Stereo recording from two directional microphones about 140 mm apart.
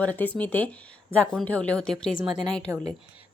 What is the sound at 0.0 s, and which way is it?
A woman's voice, 10° left (ahead or behind).